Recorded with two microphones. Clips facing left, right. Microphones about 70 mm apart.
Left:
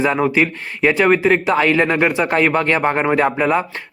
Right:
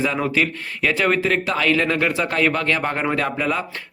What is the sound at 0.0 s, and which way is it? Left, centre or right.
Speech, left.